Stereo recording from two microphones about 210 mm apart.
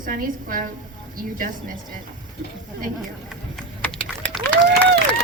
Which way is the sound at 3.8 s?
5° left (ahead or behind).